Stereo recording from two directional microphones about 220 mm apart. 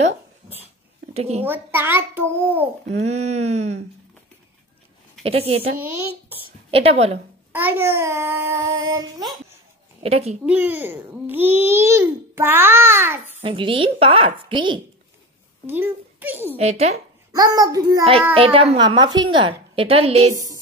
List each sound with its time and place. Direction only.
1.1 s a child's voice: 30° right (ahead or behind)
1.4 s a child's voice: 10° right (ahead or behind)
2.9 s a woman's voice: 30° right (ahead or behind)
5.2 s a woman's voice: 25° right (ahead or behind)
5.8 s a child's voice: 10° right (ahead or behind)
6.7 s a woman's voice: 25° right (ahead or behind)
7.5 s a child's voice: 10° right (ahead or behind)
10.0 s a woman's voice: 25° right (ahead or behind)
10.4 s a child's voice: 5° right (ahead or behind)
13.4 s a woman's voice: 25° right (ahead or behind)
15.6 s a child's voice: 10° right (ahead or behind)
16.5 s a woman's voice: 30° right (ahead or behind)
17.3 s a child's voice: 15° right (ahead or behind)
20.3 s a child's voice: 15° right (ahead or behind)